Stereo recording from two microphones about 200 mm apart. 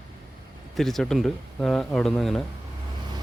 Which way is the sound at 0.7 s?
Centre (ahead or behind).